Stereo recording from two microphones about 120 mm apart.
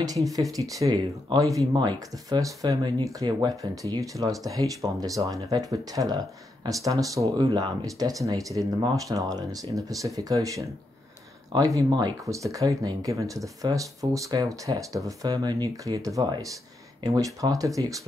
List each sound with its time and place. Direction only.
0.3 s speech: 30° right (ahead or behind)